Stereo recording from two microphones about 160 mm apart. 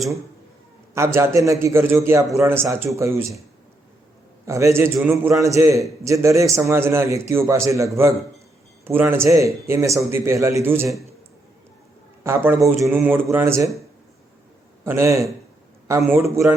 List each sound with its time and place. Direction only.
0.9 s a man's voice: 15° right (ahead or behind)
4.4 s a man's voice: 20° right (ahead or behind)
12.2 s a man's voice: 15° right (ahead or behind)
14.8 s a man's voice: 20° right (ahead or behind)